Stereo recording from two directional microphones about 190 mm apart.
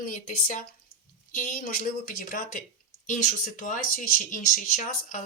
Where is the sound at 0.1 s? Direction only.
45° left (ahead or behind).